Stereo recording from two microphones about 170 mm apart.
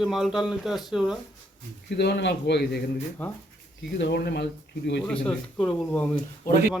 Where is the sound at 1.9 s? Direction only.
85° left.